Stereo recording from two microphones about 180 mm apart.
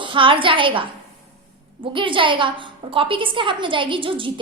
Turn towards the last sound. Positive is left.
turn(degrees=-30)  # may be behind; listen again after turning